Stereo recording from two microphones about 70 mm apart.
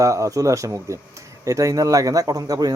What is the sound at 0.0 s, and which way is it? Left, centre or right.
A man's voice, right.